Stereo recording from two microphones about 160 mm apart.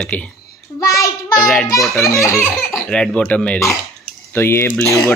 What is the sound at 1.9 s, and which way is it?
Speech, 20° left (ahead or behind).